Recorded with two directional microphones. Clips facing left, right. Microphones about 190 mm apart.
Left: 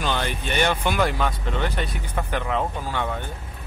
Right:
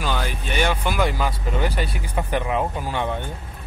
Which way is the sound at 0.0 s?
5° right (ahead or behind).